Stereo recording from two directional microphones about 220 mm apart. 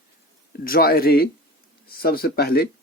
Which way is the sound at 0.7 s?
45° left (ahead or behind).